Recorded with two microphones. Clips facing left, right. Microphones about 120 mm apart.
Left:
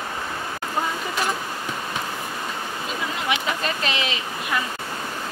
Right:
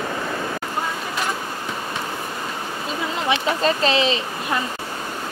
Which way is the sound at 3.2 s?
30° right (ahead or behind).